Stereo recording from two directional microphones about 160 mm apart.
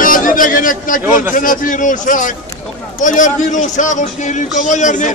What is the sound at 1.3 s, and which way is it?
A man's voice, 55° left (ahead or behind).